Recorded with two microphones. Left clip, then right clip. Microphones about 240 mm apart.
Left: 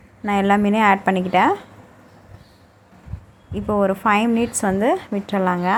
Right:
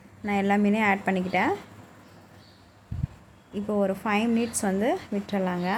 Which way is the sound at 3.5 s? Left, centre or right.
Centre.